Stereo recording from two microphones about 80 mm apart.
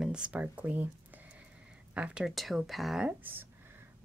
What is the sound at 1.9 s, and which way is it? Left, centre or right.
Speech, centre.